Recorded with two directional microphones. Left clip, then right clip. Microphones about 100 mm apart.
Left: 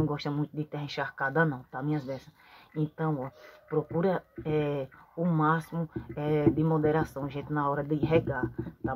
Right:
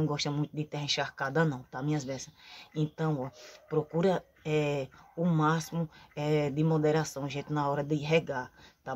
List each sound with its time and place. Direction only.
0.0 s speech: 10° right (ahead or behind)
2.0 s speech: 25° right (ahead or behind)